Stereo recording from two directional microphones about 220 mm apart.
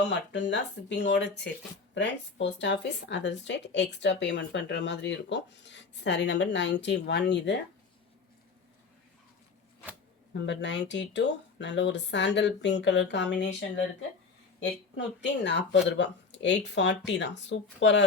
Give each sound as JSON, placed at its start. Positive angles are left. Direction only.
{"t": 0.1, "sound": "speech", "side_deg": 50}
{"t": 10.3, "sound": "speech", "side_deg": 50}
{"t": 14.6, "sound": "speech", "side_deg": 55}